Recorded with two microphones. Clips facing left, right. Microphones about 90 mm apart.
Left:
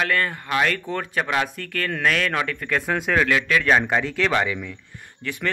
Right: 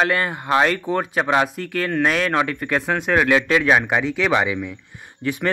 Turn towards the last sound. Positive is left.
turn(degrees=-20)  # may be behind; listen again after turning